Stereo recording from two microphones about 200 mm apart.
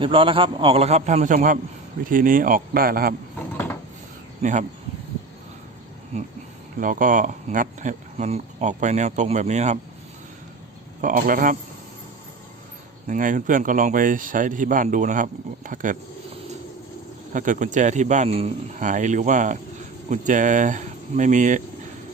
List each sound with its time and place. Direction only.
0.0 s a man's voice: 25° right (ahead or behind); by 3.2 s 45° right (ahead or behind)
6.7 s speech: 40° right (ahead or behind)
11.0 s a man's voice: 45° right (ahead or behind)
13.1 s speech: 40° right (ahead or behind)
17.3 s speech: 40° right (ahead or behind)